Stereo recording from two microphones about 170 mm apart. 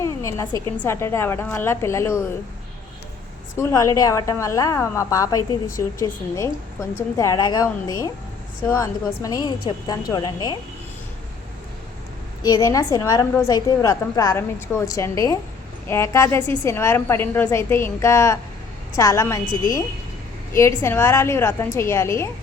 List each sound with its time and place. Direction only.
0.0 s a woman's voice: 15° left (ahead or behind)
3.6 s a woman's voice: 15° left (ahead or behind)
12.4 s a woman's voice: 20° left (ahead or behind)